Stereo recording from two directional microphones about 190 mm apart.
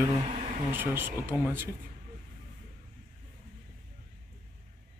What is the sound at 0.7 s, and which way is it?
Speech, 10° right (ahead or behind).